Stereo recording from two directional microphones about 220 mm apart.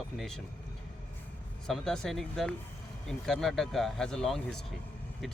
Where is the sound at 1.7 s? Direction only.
Centre (ahead or behind).